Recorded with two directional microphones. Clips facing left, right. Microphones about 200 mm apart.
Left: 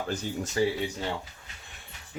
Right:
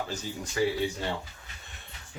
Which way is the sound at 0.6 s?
30° left (ahead or behind).